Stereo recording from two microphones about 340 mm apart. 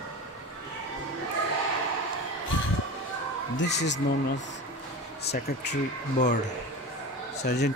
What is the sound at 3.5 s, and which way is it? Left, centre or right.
Speech, left.